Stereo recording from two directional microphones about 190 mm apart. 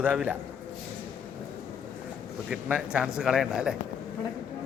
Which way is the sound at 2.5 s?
5° right (ahead or behind).